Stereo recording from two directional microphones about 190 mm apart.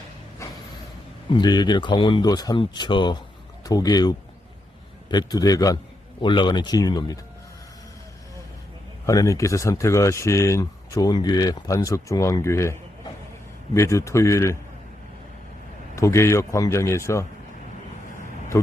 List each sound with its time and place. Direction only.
1.3 s speech: 20° left (ahead or behind)
9.0 s speech: 15° left (ahead or behind)
13.7 s speech: 15° left (ahead or behind)
16.0 s speech: 15° left (ahead or behind)
18.5 s speech: 15° left (ahead or behind)